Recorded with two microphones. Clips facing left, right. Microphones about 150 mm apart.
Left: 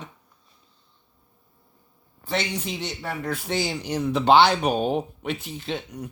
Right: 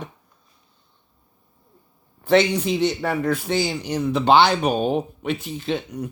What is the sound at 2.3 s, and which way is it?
Speech, 85° right.